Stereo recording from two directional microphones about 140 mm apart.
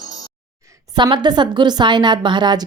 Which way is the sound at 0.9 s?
30° right (ahead or behind).